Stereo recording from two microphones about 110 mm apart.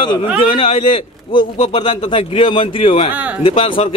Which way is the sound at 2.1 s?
50° left (ahead or behind).